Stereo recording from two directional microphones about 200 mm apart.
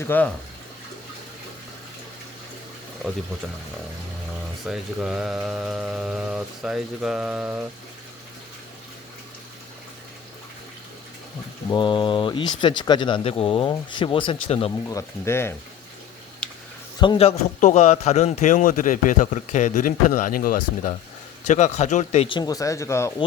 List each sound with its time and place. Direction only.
0.0 s speech: 10° left (ahead or behind)
4.6 s speech: centre (ahead or behind)
11.7 s speech: 25° left (ahead or behind)
14.8 s speech: 15° left (ahead or behind)
16.4 s a sound: 5° left (ahead or behind)
17.0 s a man's voice: 25° left (ahead or behind)